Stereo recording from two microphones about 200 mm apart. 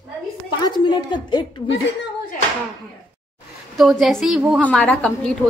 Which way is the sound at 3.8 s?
Centre (ahead or behind).